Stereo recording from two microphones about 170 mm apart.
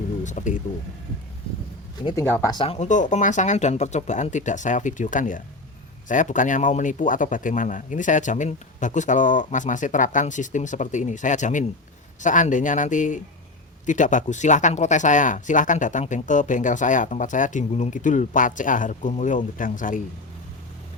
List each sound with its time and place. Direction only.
0.3 s speech: 45° left (ahead or behind)
2.4 s speech: 25° left (ahead or behind)
2.6 s speech: 45° left (ahead or behind)